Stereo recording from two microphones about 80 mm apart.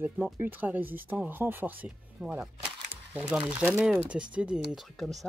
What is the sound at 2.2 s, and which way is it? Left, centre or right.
Speech, centre.